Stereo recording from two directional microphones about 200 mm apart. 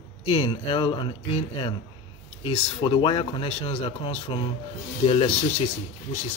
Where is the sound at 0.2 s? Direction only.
30° left (ahead or behind).